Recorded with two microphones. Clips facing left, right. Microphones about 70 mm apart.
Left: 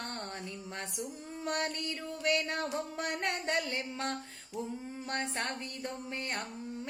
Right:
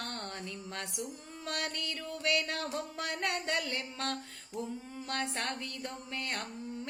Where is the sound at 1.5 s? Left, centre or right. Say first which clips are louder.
Left 3 dB; left.